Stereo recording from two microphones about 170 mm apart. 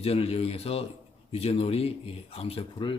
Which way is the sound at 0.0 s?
35° left (ahead or behind).